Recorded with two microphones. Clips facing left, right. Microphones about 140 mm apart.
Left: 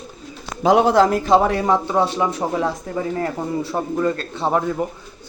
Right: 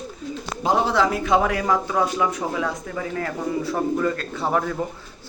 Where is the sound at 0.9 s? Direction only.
45° left (ahead or behind).